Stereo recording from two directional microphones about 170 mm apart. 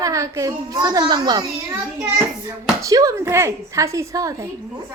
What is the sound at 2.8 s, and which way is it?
A woman's voice, 20° right (ahead or behind).